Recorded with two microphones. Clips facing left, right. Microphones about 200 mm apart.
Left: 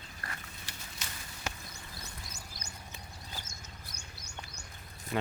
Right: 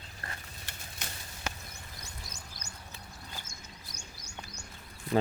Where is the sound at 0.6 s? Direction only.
55° right (ahead or behind).